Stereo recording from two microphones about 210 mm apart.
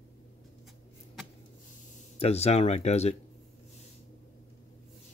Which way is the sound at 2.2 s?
30° left (ahead or behind).